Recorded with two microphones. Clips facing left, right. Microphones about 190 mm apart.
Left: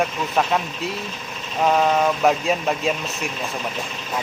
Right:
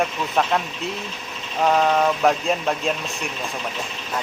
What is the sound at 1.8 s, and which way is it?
Speech, 5° left (ahead or behind).